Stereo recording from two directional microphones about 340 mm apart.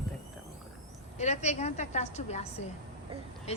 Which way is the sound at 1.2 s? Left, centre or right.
Centre.